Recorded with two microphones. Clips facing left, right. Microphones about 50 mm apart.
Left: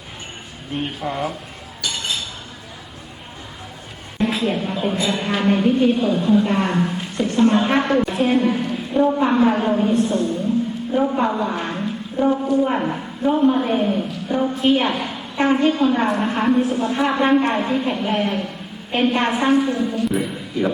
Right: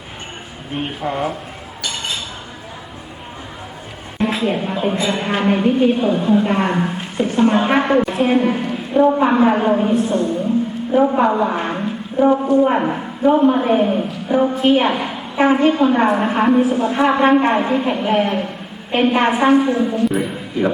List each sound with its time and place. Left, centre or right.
0.8 s a man's voice: centre
4.2 s a sound: centre
4.5 s a man's voice: centre
9.9 s a woman's voice: centre
10.9 s a woman's voice: centre